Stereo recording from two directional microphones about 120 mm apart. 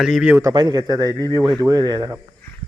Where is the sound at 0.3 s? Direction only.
30° right (ahead or behind).